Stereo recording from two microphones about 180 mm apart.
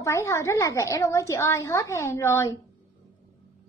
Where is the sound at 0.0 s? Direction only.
15° left (ahead or behind).